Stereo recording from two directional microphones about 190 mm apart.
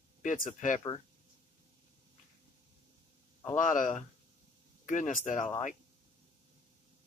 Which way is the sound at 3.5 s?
40° left (ahead or behind).